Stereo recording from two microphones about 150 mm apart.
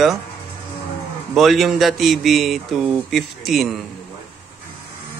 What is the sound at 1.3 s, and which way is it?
Speech, centre (ahead or behind).